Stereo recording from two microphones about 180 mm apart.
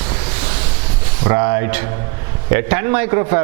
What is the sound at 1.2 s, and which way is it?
Speech, 15° right (ahead or behind).